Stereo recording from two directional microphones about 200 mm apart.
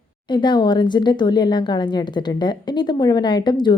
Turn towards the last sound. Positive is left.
turn(degrees=20)  # may be behind; listen again after turning